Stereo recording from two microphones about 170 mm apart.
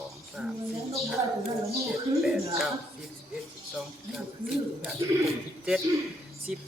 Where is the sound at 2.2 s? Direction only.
Centre (ahead or behind).